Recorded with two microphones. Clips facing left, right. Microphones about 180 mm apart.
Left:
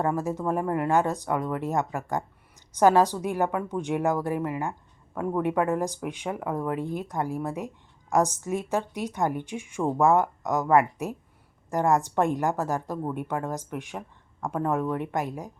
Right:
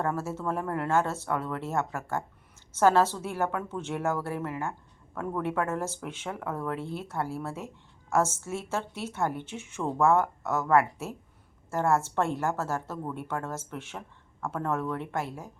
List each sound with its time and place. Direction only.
0.0 s a woman's voice: 15° left (ahead or behind)